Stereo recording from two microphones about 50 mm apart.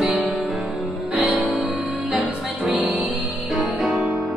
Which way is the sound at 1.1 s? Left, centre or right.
Right.